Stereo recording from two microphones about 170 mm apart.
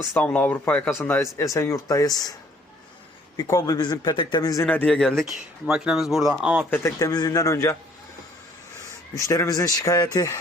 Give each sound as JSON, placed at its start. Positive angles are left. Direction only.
{"t": 0.1, "sound": "speech", "side_deg": 10}
{"t": 3.3, "sound": "a man's voice", "side_deg": 20}
{"t": 4.6, "sound": "speech", "side_deg": 10}
{"t": 6.7, "sound": "speech", "side_deg": 15}
{"t": 9.1, "sound": "a man's voice", "side_deg": 20}